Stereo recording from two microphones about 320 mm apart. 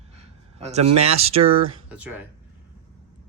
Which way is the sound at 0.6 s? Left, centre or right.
Centre.